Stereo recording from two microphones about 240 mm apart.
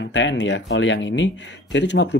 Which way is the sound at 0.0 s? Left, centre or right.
Left.